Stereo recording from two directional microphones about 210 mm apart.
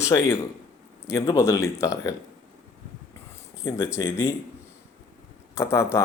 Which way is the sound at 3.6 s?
15° left (ahead or behind).